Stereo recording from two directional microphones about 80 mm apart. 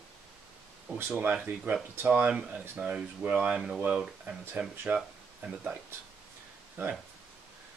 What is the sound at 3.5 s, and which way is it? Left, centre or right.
Speech, centre.